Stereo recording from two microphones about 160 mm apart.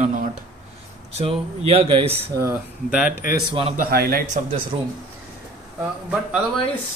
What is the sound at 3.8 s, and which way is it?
Speech, 70° right (ahead or behind).